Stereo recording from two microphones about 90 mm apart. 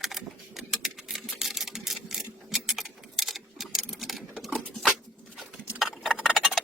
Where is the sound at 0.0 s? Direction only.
Centre (ahead or behind).